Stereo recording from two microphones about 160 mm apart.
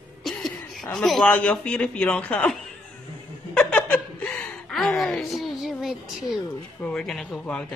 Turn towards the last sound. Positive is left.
turn(degrees=5)  # may be behind; listen again after turning